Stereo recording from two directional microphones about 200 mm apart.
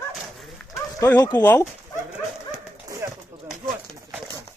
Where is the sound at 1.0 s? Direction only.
15° left (ahead or behind).